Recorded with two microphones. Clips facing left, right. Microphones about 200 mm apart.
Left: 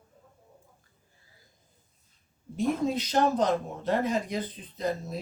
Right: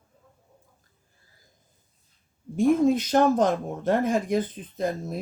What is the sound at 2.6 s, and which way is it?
Speech, 50° right (ahead or behind).